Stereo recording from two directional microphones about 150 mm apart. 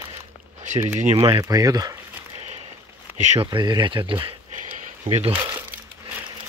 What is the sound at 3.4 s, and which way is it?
Speech, 30° right (ahead or behind).